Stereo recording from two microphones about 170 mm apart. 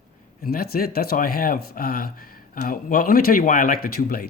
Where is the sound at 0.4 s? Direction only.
60° left (ahead or behind).